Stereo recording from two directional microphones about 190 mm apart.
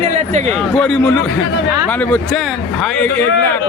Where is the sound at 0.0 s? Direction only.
40° right (ahead or behind).